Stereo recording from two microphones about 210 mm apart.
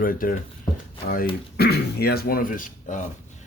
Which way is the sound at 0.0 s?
40° left (ahead or behind).